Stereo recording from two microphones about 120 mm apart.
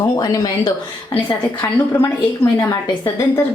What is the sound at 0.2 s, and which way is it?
A woman's voice, 35° left (ahead or behind).